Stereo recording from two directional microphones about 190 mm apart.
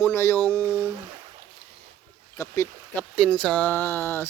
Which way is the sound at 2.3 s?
15° left (ahead or behind).